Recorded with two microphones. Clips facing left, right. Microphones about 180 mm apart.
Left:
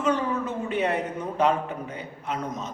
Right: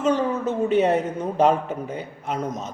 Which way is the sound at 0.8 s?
40° right (ahead or behind).